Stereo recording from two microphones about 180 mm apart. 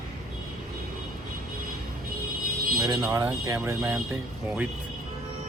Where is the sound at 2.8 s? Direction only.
20° right (ahead or behind).